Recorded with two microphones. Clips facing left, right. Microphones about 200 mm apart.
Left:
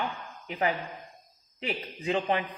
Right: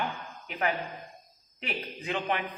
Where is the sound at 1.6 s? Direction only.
30° left (ahead or behind).